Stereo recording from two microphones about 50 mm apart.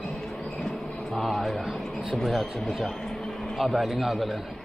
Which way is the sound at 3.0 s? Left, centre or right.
Centre.